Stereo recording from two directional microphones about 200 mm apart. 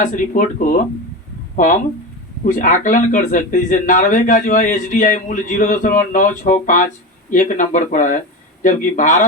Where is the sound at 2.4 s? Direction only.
40° left (ahead or behind).